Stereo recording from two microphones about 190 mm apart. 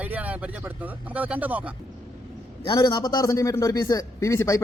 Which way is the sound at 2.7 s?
20° left (ahead or behind).